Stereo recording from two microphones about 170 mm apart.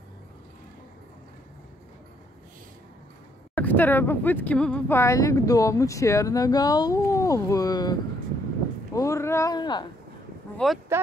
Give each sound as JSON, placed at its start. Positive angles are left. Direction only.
{"t": 3.5, "sound": "speech", "side_deg": 10}
{"t": 8.9, "sound": "a sound", "side_deg": 20}
{"t": 10.9, "sound": "speech", "side_deg": -15}